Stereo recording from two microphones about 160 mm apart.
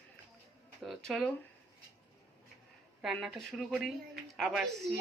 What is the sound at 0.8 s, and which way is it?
Speech, centre (ahead or behind).